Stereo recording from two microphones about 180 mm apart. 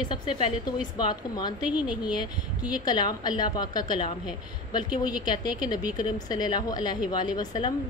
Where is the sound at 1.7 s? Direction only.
5° right (ahead or behind).